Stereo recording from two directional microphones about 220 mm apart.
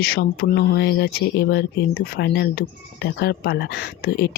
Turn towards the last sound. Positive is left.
turn(degrees=45)  # may be behind; listen again after turning